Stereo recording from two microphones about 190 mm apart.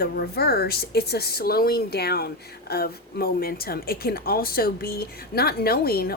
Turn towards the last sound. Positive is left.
turn(degrees=55)  # may be behind; listen again after turning